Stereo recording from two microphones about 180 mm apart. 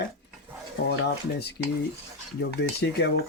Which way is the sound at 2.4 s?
65° left (ahead or behind).